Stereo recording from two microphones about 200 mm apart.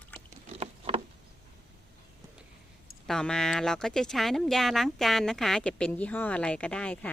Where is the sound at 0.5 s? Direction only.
30° right (ahead or behind).